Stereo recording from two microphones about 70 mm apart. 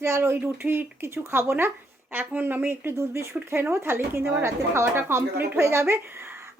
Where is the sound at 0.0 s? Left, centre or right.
Right.